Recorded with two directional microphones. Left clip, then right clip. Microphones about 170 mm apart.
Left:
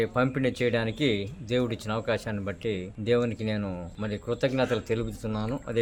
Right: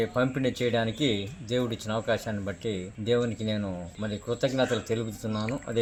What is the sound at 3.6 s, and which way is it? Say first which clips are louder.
Speech: even; 10° left (ahead or behind).